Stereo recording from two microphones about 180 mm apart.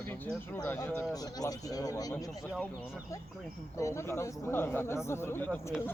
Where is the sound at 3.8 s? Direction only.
15° left (ahead or behind).